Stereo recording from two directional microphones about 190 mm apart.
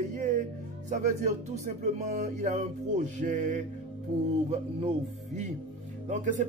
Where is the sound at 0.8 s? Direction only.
40° right (ahead or behind).